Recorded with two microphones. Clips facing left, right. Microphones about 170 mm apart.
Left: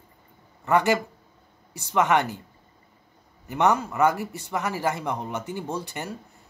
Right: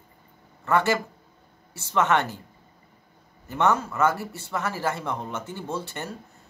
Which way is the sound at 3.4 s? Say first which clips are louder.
Left 1 dB; 15° left (ahead or behind).